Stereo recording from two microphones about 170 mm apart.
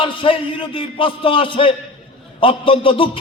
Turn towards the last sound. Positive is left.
turn(degrees=30)  # may be behind; listen again after turning